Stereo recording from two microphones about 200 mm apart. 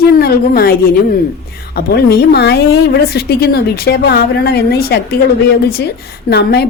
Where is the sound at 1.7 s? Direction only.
55° left (ahead or behind).